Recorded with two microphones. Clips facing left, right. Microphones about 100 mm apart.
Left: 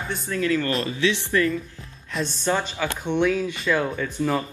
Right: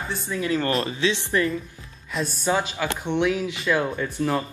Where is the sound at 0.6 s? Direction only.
30° right (ahead or behind).